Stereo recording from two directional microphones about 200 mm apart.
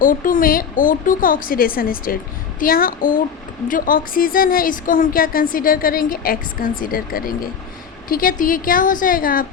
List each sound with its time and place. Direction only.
0.0 s a woman's voice: 45° left (ahead or behind)